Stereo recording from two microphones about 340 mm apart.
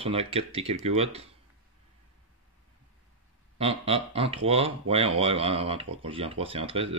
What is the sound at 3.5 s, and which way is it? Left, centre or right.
Speech, centre.